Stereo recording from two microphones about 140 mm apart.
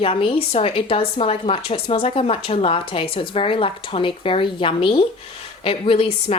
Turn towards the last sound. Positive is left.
turn(degrees=45)  # may be behind; listen again after turning